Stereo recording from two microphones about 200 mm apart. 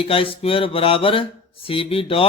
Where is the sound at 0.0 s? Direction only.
25° left (ahead or behind).